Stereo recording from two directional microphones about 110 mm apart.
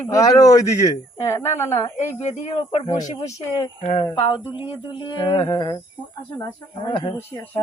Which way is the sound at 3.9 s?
60° left (ahead or behind).